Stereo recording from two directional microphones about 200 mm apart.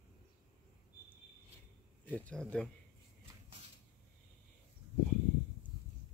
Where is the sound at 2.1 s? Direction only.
5° left (ahead or behind).